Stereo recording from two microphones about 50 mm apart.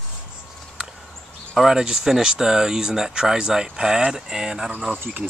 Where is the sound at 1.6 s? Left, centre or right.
Centre.